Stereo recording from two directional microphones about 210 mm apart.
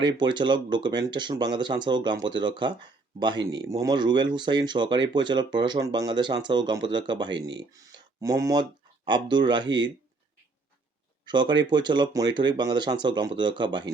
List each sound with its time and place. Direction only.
0.0 s speech: 20° right (ahead or behind)
11.3 s speech: 20° right (ahead or behind)